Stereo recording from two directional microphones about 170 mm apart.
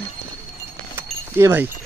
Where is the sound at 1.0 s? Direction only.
15° right (ahead or behind).